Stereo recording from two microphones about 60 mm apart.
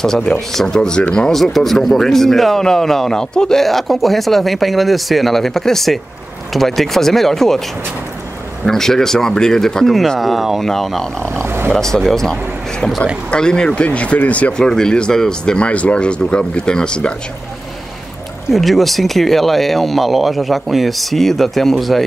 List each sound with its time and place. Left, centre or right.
0.0 s speech: centre
8.6 s speech: centre
11.4 s a sound: right
11.7 s speech: centre; by 14.7 s left
14.7 s speech: centre
18.5 s speech: centre